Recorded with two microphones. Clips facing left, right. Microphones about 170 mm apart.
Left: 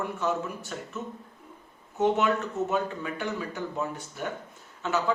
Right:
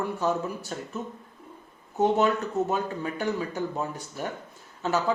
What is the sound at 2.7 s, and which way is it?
Speech, 40° right (ahead or behind).